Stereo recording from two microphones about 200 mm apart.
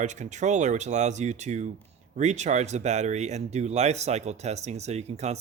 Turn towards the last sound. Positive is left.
turn(degrees=-35)  # may be behind; listen again after turning